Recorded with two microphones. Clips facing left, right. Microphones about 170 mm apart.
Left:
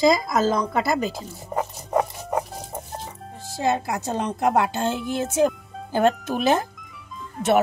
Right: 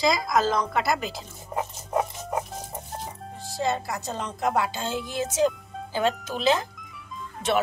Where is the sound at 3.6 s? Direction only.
55° left (ahead or behind).